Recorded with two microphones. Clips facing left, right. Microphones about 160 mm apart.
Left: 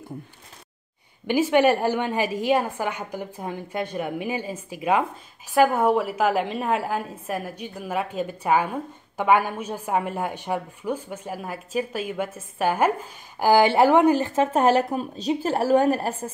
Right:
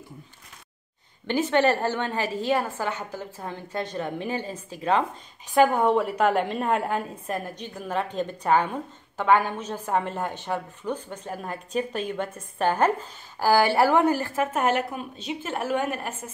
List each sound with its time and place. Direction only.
1.2 s a woman's voice: 10° left (ahead or behind); by 16.3 s 35° left (ahead or behind)